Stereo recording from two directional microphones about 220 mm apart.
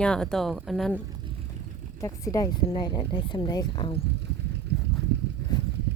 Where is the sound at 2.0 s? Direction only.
15° left (ahead or behind).